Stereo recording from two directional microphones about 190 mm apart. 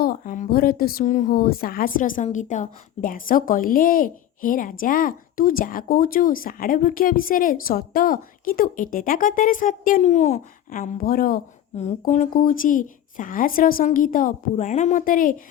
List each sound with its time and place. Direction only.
0.0 s a woman's voice: 45° left (ahead or behind)
11.8 s a woman's voice: 35° left (ahead or behind)